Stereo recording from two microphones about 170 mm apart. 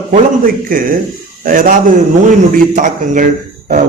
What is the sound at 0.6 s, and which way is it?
A man's voice, 55° right (ahead or behind).